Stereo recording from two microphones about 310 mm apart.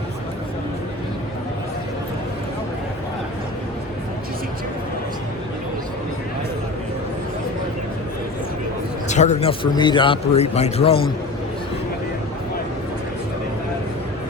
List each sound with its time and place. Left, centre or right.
9.0 s a man's voice: left